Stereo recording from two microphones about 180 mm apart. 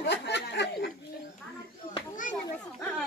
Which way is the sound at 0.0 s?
70° left (ahead or behind).